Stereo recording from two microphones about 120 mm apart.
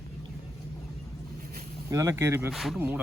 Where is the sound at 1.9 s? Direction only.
25° right (ahead or behind).